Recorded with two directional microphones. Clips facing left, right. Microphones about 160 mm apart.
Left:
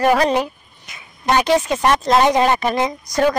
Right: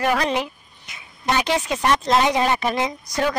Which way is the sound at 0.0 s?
40° left (ahead or behind).